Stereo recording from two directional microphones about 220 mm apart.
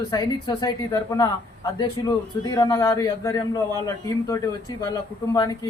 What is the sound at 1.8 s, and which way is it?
Speech, 20° left (ahead or behind).